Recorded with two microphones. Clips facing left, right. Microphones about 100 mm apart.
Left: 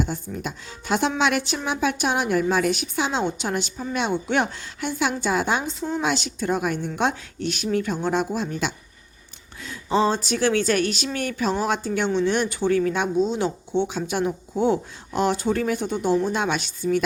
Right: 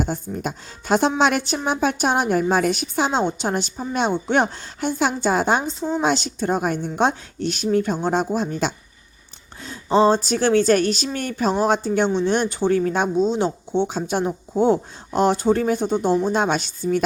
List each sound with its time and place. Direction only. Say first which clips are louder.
0.0 s speech: right 3 dB; 40° right (ahead or behind)